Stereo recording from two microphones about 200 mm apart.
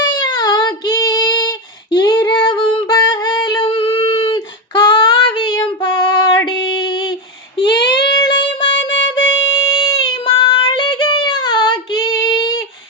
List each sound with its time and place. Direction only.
0.0 s child singing: 20° left (ahead or behind)
9.1 s music: 75° left (ahead or behind)
10.2 s child singing: 20° left (ahead or behind)